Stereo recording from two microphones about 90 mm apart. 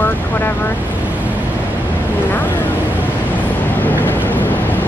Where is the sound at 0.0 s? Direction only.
20° left (ahead or behind).